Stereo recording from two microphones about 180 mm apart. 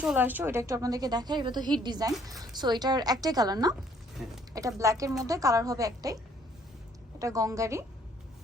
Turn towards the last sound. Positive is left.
turn(degrees=-15)  # may be behind; listen again after turning